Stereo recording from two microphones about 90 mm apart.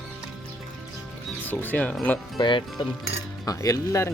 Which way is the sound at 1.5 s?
20° left (ahead or behind).